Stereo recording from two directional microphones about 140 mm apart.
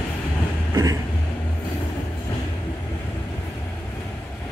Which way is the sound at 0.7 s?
25° right (ahead or behind).